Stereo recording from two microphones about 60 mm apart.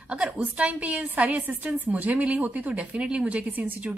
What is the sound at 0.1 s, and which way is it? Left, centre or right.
Speech, centre.